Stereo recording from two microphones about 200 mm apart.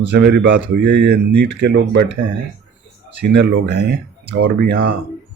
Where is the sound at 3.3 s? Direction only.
60° right (ahead or behind).